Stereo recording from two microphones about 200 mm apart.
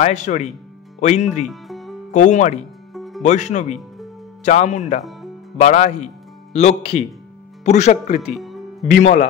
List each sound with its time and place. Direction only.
0.0 s speech: 35° left (ahead or behind)
1.4 s music: centre (ahead or behind)
2.1 s speech: 35° left (ahead or behind)
2.9 s music: centre (ahead or behind)
3.2 s speech: 35° left (ahead or behind)
8.3 s music: centre (ahead or behind)
8.9 s speech: 40° left (ahead or behind)